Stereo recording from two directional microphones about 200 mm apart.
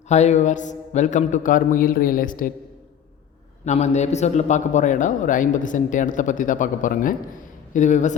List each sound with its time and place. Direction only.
0.1 s a man's voice: 35° left (ahead or behind)
3.7 s a man's voice: 35° left (ahead or behind)